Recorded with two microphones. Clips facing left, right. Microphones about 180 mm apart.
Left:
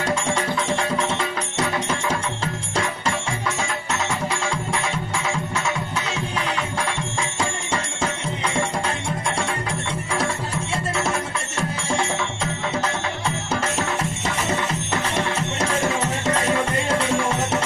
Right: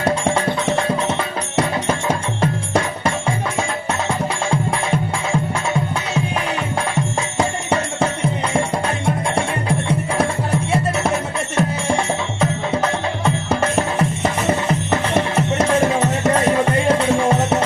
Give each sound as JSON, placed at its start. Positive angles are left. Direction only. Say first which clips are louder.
{"t": 2.4, "sound": "music", "louder": "right 6 dB", "side_deg": -55}
{"t": 7.3, "sound": "music", "louder": "right 8 dB", "side_deg": -55}
{"t": 9.0, "sound": "music", "louder": "right 5 dB", "side_deg": -55}
{"t": 14.7, "sound": "music", "louder": "right 7 dB", "side_deg": -55}